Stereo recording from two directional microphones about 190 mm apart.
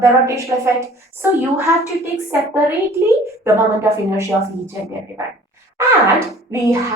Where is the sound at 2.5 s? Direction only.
15° right (ahead or behind).